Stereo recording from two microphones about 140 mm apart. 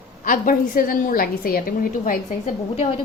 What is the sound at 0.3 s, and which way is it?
A woman's voice, 85° left.